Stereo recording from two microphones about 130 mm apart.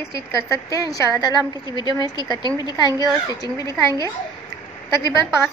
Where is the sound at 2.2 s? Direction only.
35° right (ahead or behind).